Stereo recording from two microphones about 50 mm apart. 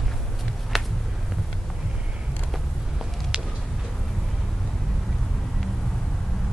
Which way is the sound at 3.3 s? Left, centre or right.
Centre.